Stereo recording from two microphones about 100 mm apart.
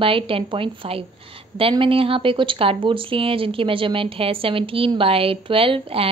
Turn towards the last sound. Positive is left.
turn(degrees=-70)  # may be behind; listen again after turning